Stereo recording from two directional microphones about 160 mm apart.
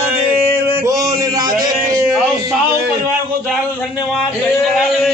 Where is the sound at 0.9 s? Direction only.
20° right (ahead or behind).